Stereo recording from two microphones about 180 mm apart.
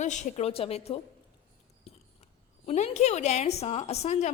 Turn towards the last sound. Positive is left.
turn(degrees=40)  # may be behind; listen again after turning